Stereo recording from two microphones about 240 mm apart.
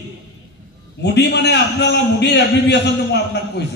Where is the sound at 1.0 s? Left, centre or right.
Left.